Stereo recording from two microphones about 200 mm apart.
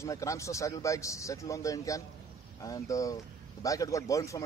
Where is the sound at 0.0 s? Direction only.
15° left (ahead or behind).